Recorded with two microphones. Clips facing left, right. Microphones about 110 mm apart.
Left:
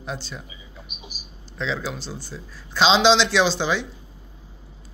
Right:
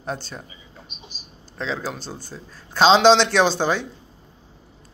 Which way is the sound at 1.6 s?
40° right (ahead or behind).